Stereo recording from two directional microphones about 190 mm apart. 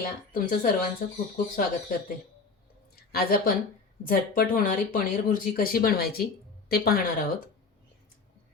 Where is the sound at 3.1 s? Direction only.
50° left (ahead or behind).